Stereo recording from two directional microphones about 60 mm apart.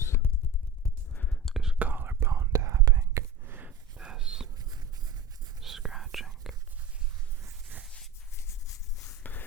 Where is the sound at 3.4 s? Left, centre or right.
Right.